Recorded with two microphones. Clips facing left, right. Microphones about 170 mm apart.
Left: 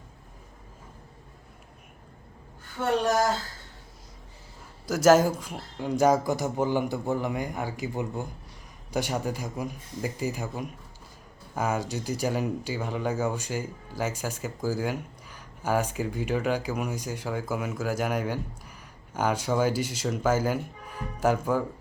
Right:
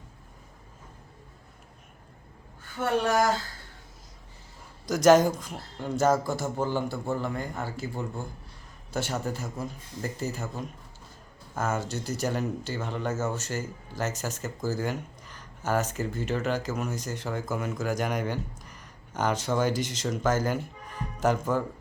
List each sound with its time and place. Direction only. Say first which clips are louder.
4.9 s speech: even; 5° left (ahead or behind)